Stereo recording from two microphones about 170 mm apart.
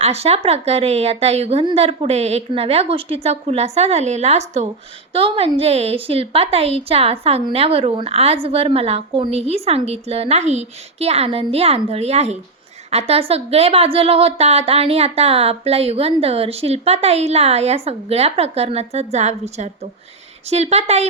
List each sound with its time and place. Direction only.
0.0 s speech: 40° right (ahead or behind)